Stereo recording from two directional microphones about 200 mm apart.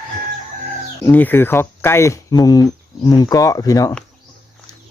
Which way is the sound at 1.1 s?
10° left (ahead or behind).